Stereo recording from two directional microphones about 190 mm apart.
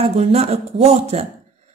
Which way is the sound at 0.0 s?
35° right (ahead or behind).